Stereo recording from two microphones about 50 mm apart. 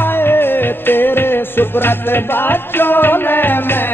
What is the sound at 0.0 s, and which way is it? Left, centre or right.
Music, left.